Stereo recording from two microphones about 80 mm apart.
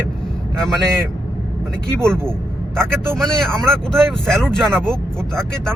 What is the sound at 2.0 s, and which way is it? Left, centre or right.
A man's voice, right.